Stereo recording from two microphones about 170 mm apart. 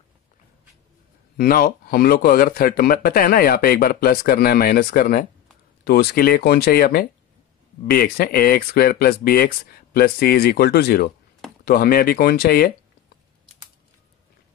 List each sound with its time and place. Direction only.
1.3 s speech: 60° left (ahead or behind)